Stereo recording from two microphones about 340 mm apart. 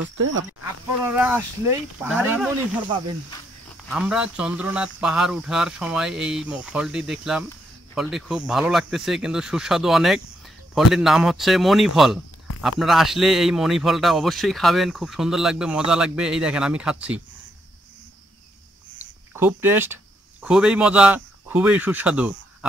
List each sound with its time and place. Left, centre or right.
0.2 s speech: right
1.0 s a man's voice: centre
3.9 s a man's voice: centre
18.9 s a sound: centre
20.4 s speech: centre